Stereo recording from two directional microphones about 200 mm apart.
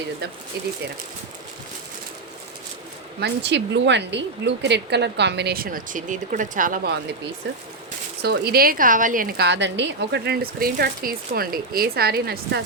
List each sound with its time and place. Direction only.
0.5 s a woman's voice: 55° right (ahead or behind)
3.2 s a woman's voice: 55° right (ahead or behind)
8.2 s a woman's voice: 50° right (ahead or behind)